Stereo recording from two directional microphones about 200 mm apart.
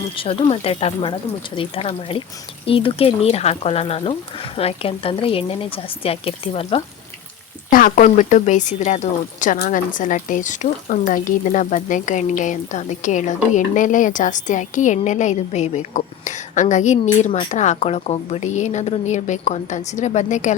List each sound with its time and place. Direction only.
0.2 s a woman's voice: 30° left (ahead or behind)
7.7 s speech: 45° left (ahead or behind)